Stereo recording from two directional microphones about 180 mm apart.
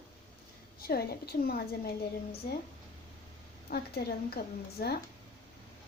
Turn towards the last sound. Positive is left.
turn(degrees=55)  # may be behind; listen again after turning